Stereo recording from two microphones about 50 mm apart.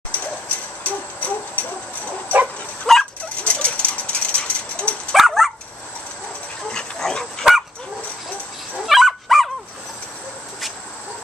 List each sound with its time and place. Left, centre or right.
0.1 s owl: left
2.9 s dog: centre
3.4 s pigeon: left
5.1 s dog: centre
6.7 s dog: centre
8.8 s dog: centre